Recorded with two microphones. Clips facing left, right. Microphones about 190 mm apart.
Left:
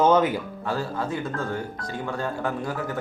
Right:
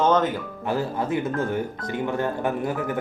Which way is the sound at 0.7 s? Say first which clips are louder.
Right 4 dB; 20° right (ahead or behind).